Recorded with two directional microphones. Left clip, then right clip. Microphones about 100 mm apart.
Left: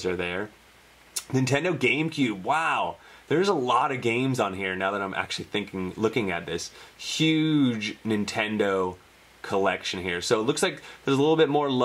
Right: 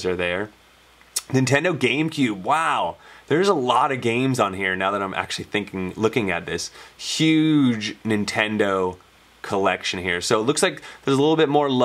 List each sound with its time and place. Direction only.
0.0 s speech: 60° right (ahead or behind)